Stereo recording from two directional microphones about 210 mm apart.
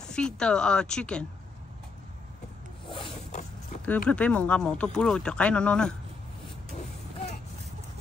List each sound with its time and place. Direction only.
0.0 s speech: 5° left (ahead or behind)
2.9 s a sound: 25° left (ahead or behind)
3.8 s speech: 5° left (ahead or behind)